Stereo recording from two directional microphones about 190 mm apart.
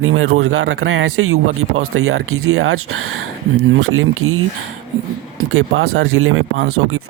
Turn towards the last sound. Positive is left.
turn(degrees=-80)